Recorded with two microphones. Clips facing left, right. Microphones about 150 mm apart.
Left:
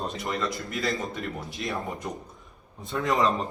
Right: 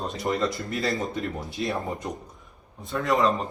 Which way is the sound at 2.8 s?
Centre (ahead or behind).